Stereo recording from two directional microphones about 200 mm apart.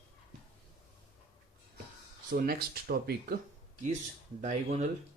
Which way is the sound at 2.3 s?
45° right (ahead or behind).